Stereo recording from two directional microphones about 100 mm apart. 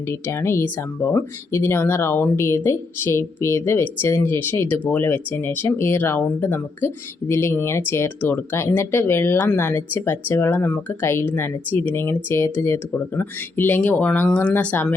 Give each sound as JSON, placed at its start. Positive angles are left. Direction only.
{"t": 0.1, "sound": "speech", "side_deg": 25}